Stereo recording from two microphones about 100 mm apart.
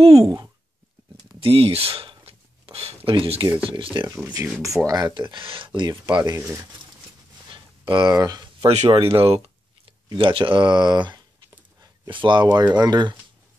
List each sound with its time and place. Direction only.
0.2 s speech: 35° right (ahead or behind)
1.4 s a sound: 70° right (ahead or behind)
3.1 s speech: 60° right (ahead or behind)
4.1 s speech: 30° right (ahead or behind); by 5.9 s 55° right (ahead or behind)
5.9 s speech: 45° right (ahead or behind)
7.4 s a sound: 55° right (ahead or behind); by 8.5 s 40° right (ahead or behind)
8.5 s speech: 60° right (ahead or behind)
10.0 s speech: 60° right (ahead or behind)